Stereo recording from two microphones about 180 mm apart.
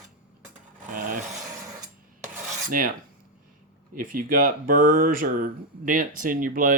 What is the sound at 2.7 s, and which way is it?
Speech, 50° right (ahead or behind).